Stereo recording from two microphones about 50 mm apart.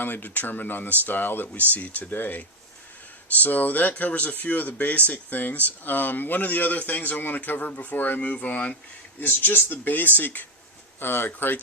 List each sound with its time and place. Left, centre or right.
0.0 s speech: left
3.4 s speech: left